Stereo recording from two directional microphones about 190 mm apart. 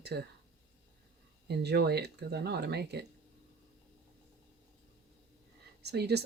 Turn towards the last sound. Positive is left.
turn(degrees=-60)  # may be behind; listen again after turning